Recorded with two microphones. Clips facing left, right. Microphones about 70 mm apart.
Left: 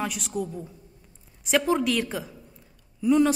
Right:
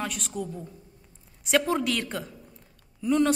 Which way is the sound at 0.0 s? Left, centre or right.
Centre.